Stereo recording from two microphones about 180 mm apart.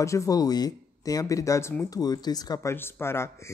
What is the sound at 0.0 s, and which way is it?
Speech, 15° left (ahead or behind).